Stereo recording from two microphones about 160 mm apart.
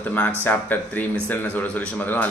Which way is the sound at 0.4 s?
10° left (ahead or behind).